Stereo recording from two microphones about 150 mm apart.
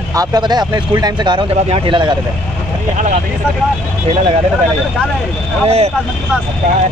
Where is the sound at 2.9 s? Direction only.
55° right (ahead or behind).